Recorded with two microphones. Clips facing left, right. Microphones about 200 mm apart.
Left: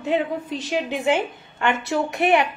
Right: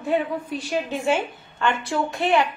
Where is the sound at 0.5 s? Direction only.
20° left (ahead or behind).